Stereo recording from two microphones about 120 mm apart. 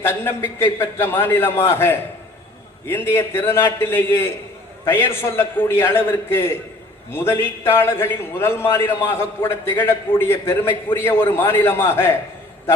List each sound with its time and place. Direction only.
0.0 s a man's voice: 20° left (ahead or behind)